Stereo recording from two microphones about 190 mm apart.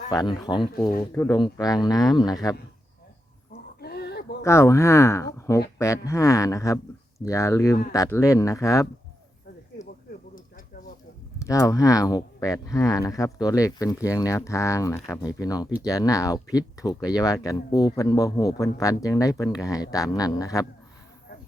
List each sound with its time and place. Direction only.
0.1 s speech: 20° left (ahead or behind)
3.5 s a sound: 55° left (ahead or behind)
4.4 s speech: 15° left (ahead or behind)
11.4 s speech: 15° left (ahead or behind)